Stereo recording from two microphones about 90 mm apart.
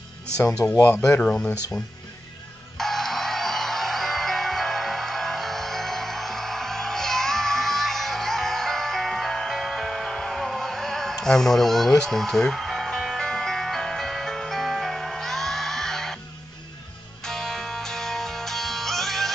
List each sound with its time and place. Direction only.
0.6 s speech: 35° left (ahead or behind)
1.2 s speech: 10° left (ahead or behind)
2.8 s music: 5° left (ahead or behind)
17.2 s music: 5° left (ahead or behind)